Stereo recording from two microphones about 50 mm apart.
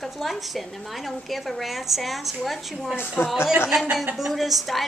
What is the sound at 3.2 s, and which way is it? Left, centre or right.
Speech, left.